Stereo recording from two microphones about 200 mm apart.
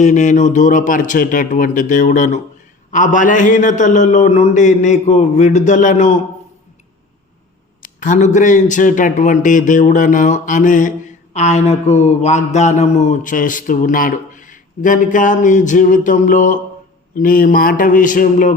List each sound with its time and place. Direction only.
0.0 s mantra: 35° left (ahead or behind)
7.8 s mantra: 40° left (ahead or behind)
17.2 s a man's voice: 45° left (ahead or behind)